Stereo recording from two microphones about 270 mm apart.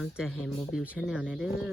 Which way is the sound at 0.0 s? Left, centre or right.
Centre.